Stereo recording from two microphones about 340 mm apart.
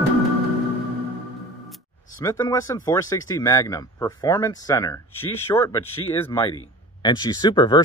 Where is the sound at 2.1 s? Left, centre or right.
Centre.